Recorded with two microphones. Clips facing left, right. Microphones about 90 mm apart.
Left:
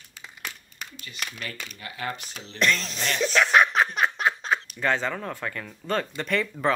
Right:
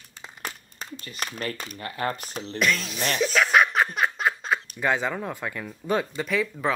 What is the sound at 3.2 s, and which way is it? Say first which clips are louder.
Speech: even; centre (ahead or behind).